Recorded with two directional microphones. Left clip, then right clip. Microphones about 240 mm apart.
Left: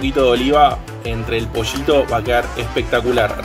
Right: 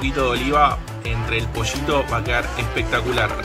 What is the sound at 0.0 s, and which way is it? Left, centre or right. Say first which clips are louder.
Speech: left 6 dB; centre.